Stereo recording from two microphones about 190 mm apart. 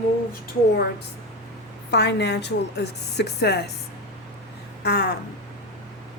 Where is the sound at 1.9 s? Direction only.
60° left (ahead or behind).